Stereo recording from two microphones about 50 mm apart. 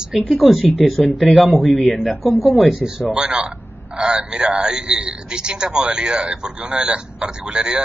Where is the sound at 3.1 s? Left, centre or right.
Right.